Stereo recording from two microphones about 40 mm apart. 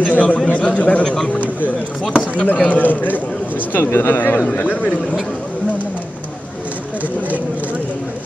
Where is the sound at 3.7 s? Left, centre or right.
Left.